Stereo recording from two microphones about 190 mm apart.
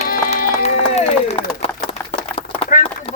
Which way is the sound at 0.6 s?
35° left (ahead or behind).